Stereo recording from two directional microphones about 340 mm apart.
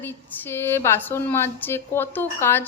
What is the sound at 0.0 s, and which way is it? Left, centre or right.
A woman's voice, centre.